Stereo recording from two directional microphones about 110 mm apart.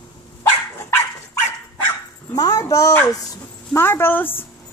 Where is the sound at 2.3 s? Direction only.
35° left (ahead or behind).